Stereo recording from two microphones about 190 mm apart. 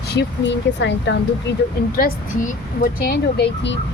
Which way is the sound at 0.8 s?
65° left (ahead or behind).